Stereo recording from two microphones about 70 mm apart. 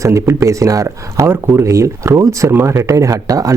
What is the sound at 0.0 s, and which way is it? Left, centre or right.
Speech, right.